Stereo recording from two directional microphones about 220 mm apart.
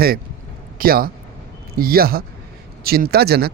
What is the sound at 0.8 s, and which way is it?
A man's voice, 40° right (ahead or behind).